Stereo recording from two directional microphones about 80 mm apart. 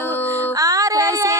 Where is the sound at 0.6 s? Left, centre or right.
Right.